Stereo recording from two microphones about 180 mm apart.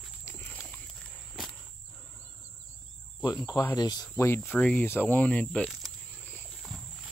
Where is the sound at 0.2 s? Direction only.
10° left (ahead or behind).